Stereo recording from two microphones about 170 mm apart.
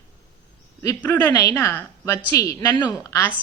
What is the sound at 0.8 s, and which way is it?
A woman's voice, 15° left (ahead or behind).